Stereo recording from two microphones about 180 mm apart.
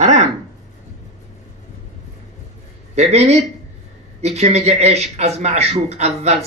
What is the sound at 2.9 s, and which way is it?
A man's voice, 35° right (ahead or behind).